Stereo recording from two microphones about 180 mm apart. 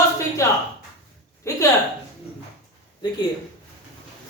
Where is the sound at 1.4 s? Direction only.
15° left (ahead or behind).